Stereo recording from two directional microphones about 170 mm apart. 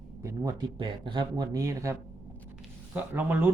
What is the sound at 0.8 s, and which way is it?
Speech, 30° right (ahead or behind).